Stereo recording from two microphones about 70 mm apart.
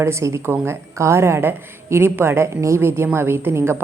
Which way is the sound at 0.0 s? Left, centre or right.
Right.